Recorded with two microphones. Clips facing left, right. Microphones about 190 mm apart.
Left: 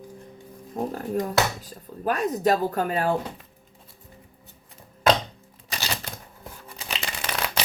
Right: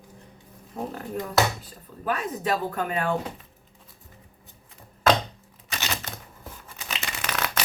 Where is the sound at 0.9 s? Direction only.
40° left (ahead or behind).